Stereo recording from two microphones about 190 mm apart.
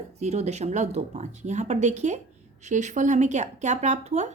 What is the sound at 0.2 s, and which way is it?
Speech, 35° right (ahead or behind).